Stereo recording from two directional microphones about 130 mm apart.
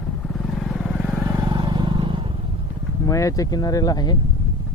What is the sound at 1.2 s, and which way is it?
Vehicle, 25° right (ahead or behind).